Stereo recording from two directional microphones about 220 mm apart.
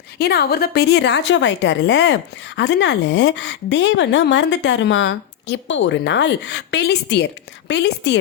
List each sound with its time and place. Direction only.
0.2 s a woman's voice: 45° left (ahead or behind)